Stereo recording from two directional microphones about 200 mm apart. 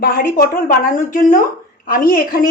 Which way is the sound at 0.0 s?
45° left (ahead or behind).